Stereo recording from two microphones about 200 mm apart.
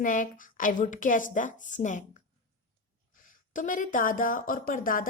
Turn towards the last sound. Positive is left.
turn(degrees=45)  # may be behind; listen again after turning